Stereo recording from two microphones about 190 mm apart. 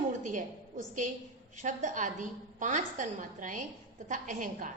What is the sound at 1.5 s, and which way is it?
A woman's voice, 40° right (ahead or behind).